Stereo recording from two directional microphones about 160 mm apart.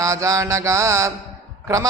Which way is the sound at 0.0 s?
20° right (ahead or behind).